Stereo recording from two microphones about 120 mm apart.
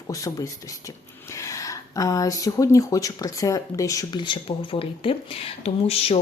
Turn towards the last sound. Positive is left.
turn(degrees=55)  # may be behind; listen again after turning